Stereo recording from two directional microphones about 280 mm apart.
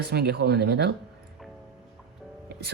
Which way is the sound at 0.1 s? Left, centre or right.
Right.